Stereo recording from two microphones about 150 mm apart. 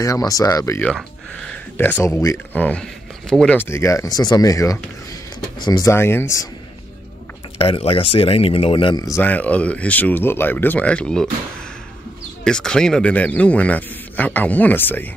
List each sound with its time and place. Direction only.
0.0 s speech: 25° left (ahead or behind)
0.8 s speech: 5° left (ahead or behind)
7.5 s speech: 35° left (ahead or behind)
9.0 s speech: 15° left (ahead or behind)
12.4 s speech: 5° left (ahead or behind)